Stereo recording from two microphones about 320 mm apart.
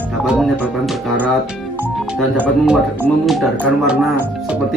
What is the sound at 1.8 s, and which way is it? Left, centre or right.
Speech, centre.